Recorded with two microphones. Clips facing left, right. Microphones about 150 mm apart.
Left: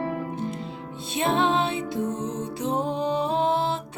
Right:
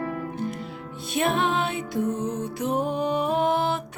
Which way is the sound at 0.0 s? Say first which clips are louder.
Left 1 dB; 25° left (ahead or behind).